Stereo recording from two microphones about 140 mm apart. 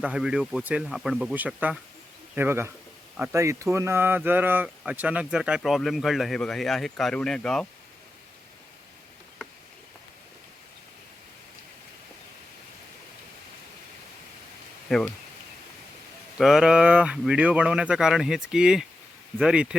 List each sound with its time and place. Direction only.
0.0 s speech: 5° right (ahead or behind)
14.8 s speech: 5° left (ahead or behind)
16.4 s speech: 5° right (ahead or behind)